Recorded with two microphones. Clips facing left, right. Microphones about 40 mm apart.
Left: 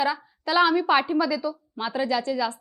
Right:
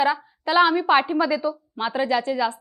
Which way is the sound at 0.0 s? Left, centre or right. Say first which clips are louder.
Right 4 dB; right.